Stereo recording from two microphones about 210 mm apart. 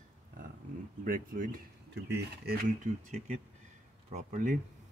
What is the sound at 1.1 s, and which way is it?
Speech, 40° right (ahead or behind).